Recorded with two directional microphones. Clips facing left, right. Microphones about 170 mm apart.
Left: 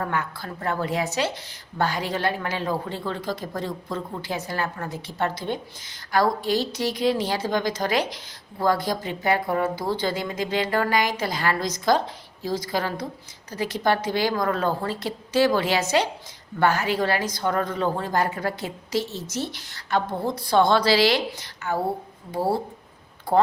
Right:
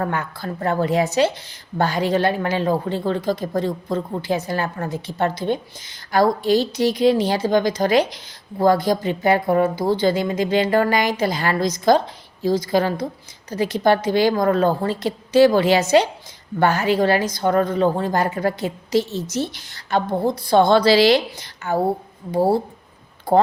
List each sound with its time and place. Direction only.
0.0 s a woman's voice: 30° right (ahead or behind)